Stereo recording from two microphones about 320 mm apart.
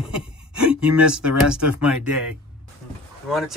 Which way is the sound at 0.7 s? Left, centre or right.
Centre.